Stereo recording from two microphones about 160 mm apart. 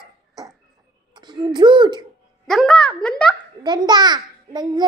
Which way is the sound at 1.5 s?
30° right (ahead or behind).